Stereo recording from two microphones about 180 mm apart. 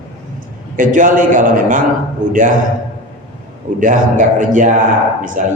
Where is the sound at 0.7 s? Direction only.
45° right (ahead or behind).